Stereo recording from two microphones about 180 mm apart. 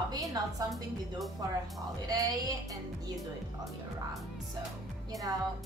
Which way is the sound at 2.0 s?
20° right (ahead or behind).